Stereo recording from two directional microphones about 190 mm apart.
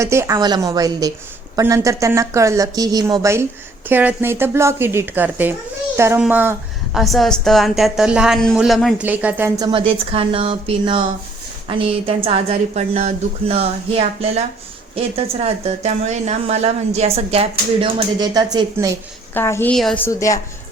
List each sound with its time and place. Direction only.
0.0 s a woman's voice: 15° right (ahead or behind)
9.6 s a woman's voice: 30° right (ahead or behind)
19.3 s a woman's voice: 10° left (ahead or behind)
20.1 s a woman's voice: 15° left (ahead or behind)